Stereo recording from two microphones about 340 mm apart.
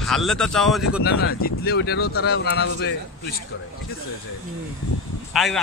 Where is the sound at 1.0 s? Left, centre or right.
Left.